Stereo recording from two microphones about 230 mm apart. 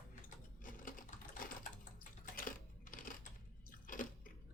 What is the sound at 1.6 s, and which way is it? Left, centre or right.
Typing, left.